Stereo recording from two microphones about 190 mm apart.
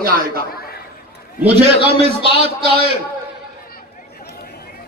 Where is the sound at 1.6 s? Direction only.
35° right (ahead or behind).